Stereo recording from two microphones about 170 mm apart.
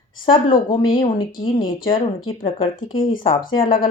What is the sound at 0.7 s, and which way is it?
Speech, 30° left (ahead or behind).